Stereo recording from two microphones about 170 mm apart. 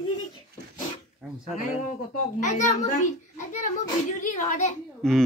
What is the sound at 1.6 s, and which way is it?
A child's voice, 45° left (ahead or behind).